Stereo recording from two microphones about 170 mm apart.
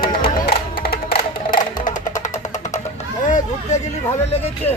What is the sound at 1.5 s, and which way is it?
Music, 50° left (ahead or behind).